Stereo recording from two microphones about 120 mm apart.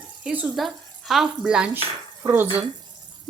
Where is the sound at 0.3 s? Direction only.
5° right (ahead or behind).